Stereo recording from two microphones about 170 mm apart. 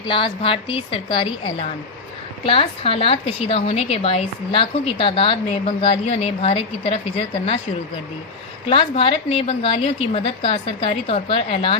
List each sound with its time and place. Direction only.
0.0 s a woman's voice: 30° left (ahead or behind)
2.4 s a woman's voice: 35° left (ahead or behind)
8.7 s a woman's voice: 30° left (ahead or behind)